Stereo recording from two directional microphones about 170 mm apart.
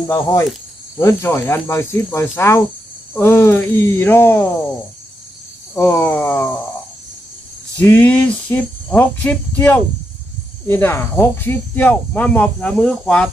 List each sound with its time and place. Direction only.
0.0 s speech: 15° left (ahead or behind)
5.8 s speech: 15° left (ahead or behind)
7.8 s speech: 10° left (ahead or behind)